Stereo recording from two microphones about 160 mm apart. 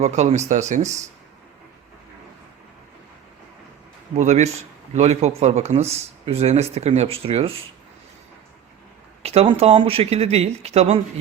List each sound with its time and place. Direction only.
0.0 s speech: 40° right (ahead or behind)
4.2 s speech: 45° right (ahead or behind)
9.2 s speech: 40° right (ahead or behind)